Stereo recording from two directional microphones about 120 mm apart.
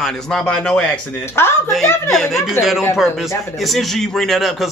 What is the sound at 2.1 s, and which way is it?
A man's voice, centre (ahead or behind).